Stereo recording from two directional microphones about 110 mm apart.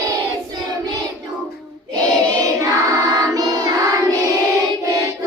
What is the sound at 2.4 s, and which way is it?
Choir, 30° right (ahead or behind).